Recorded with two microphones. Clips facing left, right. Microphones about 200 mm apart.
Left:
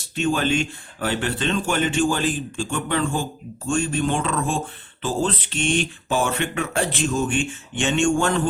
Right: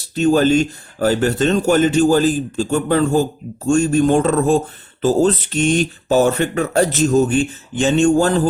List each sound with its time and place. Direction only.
0.0 s speech: 40° right (ahead or behind)